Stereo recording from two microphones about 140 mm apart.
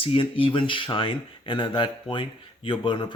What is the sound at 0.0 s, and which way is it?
Speech, 40° left (ahead or behind).